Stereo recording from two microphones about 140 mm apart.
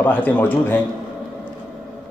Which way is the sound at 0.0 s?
10° left (ahead or behind).